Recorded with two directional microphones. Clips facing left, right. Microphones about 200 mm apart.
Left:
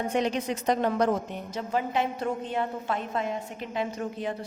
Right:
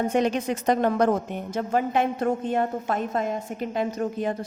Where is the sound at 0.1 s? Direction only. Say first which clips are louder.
Right 4 dB; 50° right (ahead or behind).